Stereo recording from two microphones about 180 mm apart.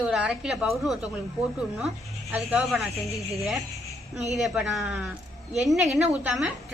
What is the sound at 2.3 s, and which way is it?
Speech, 5° right (ahead or behind).